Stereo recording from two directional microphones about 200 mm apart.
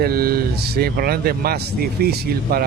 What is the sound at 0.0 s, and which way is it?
Speech, 50° right (ahead or behind).